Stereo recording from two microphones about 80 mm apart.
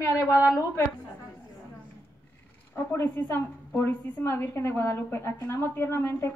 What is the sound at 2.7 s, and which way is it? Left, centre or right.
A woman's voice, left.